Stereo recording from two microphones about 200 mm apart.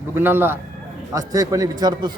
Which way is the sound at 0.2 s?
10° right (ahead or behind).